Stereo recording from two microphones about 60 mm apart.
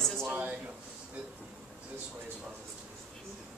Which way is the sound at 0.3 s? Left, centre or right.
Right.